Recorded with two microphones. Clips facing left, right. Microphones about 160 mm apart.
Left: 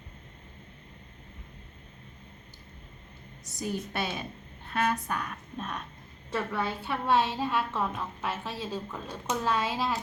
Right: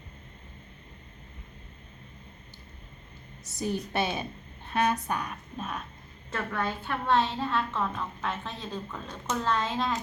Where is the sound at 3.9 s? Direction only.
20° right (ahead or behind).